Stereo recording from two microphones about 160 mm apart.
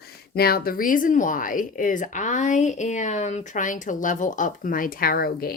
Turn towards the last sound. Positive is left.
turn(degrees=70)  # may be behind; listen again after turning